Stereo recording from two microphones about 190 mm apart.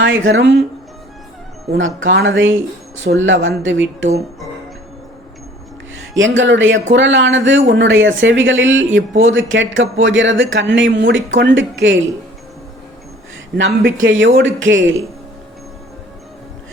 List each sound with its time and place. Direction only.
0.0 s speech: 90° right; by 0.6 s 75° right (ahead or behind)
1.7 s speech: 90° right
6.1 s speech: 85° right
13.6 s speech: 75° right (ahead or behind)